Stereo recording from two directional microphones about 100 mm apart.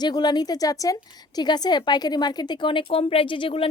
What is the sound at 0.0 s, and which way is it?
A woman's voice, 45° left (ahead or behind).